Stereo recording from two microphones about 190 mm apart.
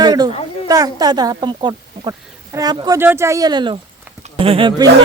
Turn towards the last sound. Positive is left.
turn(degrees=-25)  # may be behind; listen again after turning